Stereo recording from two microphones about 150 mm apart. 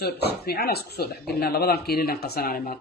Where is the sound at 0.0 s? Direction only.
90° left.